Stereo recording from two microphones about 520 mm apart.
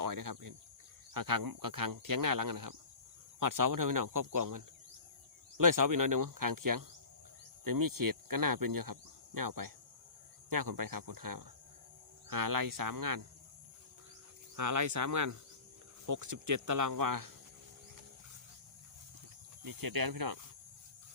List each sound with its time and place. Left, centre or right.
0.0 s speech: right
1.1 s cricket: right
14.5 s cricket: right
19.6 s cricket: right